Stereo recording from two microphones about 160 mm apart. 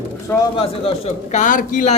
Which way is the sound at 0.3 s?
35° left (ahead or behind).